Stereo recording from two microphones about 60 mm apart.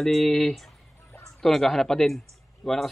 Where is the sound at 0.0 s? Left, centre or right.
Centre.